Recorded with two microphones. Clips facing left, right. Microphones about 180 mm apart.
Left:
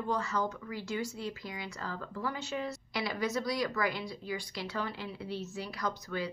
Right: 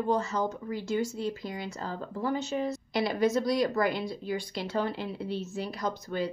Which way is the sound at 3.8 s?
55° right (ahead or behind).